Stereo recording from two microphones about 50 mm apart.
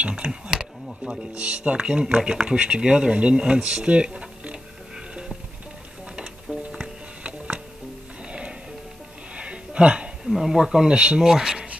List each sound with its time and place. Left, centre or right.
0.0 s speech: right
6.1 s music: centre
9.3 s a sound: right
10.3 s speech: centre
11.0 s speech: right
11.2 s speech: centre